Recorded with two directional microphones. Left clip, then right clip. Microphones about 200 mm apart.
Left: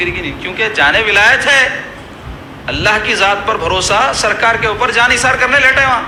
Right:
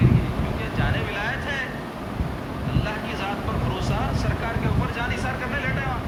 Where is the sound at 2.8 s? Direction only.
50° left (ahead or behind).